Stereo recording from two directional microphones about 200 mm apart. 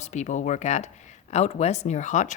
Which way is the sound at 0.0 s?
35° left (ahead or behind).